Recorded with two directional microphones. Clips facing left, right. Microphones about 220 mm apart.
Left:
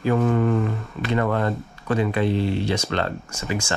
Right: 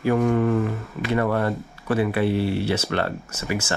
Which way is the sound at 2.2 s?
10° right (ahead or behind).